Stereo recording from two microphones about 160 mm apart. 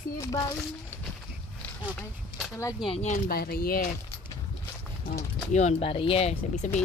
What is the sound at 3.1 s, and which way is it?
Speech, 70° left (ahead or behind).